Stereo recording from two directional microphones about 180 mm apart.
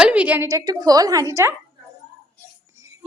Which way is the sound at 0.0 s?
5° right (ahead or behind).